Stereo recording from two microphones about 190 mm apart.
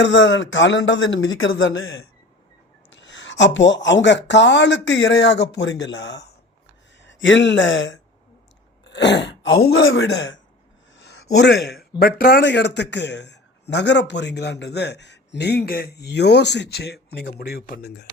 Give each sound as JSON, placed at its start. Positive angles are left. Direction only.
{"t": 0.0, "sound": "speech", "side_deg": 75}
{"t": 2.9, "sound": "speech", "side_deg": 80}
{"t": 7.0, "sound": "speech", "side_deg": 75}
{"t": 8.8, "sound": "throat clearing", "side_deg": 65}
{"t": 9.6, "sound": "speech", "side_deg": 75}
{"t": 10.9, "sound": "speech", "side_deg": 60}